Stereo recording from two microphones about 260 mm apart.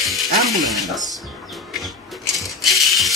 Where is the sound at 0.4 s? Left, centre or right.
Centre.